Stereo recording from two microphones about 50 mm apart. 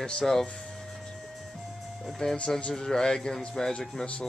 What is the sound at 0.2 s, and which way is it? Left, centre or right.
Speech, centre.